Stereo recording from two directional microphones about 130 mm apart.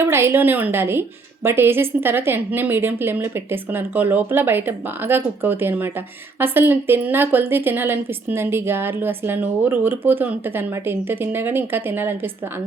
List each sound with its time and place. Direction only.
0.0 s a woman's voice: 20° right (ahead or behind)